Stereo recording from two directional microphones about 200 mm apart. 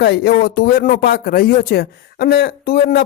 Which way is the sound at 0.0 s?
55° left (ahead or behind).